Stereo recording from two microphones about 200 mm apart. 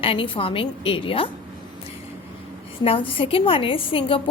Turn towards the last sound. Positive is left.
turn(degrees=25)  # may be behind; listen again after turning